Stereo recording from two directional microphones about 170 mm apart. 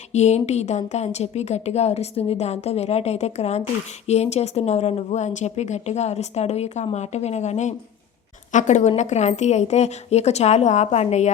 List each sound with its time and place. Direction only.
0.1 s a woman's voice: 40° left (ahead or behind)